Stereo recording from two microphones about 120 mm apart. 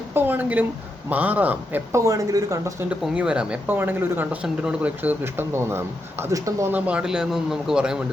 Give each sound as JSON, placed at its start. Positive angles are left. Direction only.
{"t": 0.1, "sound": "speech", "side_deg": -15}
{"t": 1.9, "sound": "speech", "side_deg": -25}
{"t": 2.9, "sound": "speech", "side_deg": -10}
{"t": 6.7, "sound": "speech", "side_deg": -15}